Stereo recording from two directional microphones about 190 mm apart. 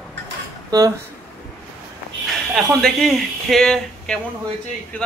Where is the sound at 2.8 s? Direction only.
Centre (ahead or behind).